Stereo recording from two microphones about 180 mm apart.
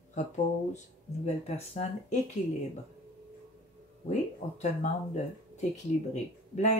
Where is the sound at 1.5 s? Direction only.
35° left (ahead or behind).